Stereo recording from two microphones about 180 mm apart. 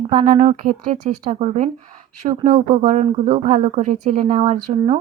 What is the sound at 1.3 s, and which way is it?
A woman's voice, 35° right (ahead or behind).